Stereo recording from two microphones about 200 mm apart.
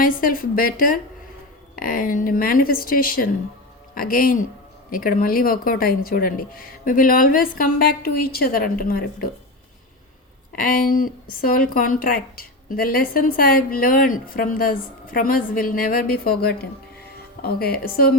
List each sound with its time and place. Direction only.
0.0 s a woman's voice: 45° left (ahead or behind)
10.5 s a woman's voice: 45° left (ahead or behind)